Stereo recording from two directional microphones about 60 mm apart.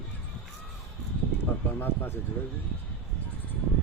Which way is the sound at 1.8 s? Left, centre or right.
Left.